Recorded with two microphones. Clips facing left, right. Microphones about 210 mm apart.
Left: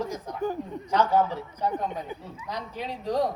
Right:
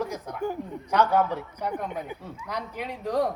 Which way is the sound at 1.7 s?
15° right (ahead or behind).